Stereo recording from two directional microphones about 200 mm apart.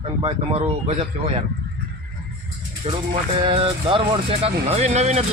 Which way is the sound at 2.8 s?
30° right (ahead or behind).